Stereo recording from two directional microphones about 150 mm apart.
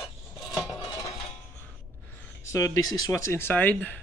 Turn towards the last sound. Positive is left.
turn(degrees=10)  # may be behind; listen again after turning